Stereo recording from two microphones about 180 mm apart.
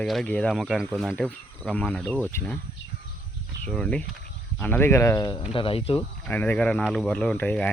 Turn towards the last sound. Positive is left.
turn(degrees=5)  # may be behind; listen again after turning